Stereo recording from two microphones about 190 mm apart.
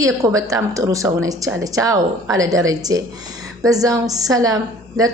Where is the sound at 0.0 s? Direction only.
15° right (ahead or behind).